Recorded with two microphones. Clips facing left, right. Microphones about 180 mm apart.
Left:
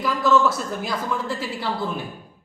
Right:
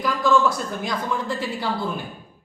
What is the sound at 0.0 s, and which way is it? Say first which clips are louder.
A man's voice: even; 5° left (ahead or behind).